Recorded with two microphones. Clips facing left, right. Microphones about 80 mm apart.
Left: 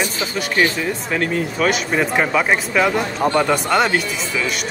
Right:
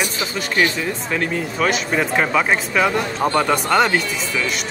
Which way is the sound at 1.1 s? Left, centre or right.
Centre.